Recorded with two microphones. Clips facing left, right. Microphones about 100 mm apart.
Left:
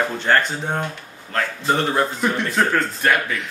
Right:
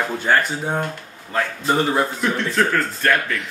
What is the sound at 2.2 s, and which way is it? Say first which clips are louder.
Speech: even; 5° left (ahead or behind).